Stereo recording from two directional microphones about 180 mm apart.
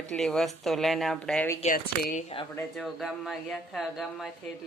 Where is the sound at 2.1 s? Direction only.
30° left (ahead or behind).